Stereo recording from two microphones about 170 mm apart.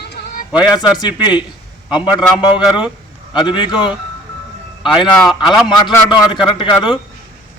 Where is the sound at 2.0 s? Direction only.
10° right (ahead or behind).